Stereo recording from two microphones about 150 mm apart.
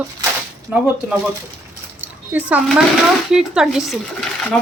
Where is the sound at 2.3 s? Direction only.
10° right (ahead or behind).